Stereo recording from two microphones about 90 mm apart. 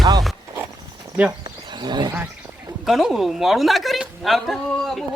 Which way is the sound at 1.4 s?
55° right (ahead or behind).